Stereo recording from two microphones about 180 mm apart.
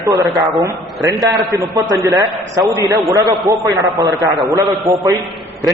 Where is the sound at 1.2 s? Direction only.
Centre (ahead or behind).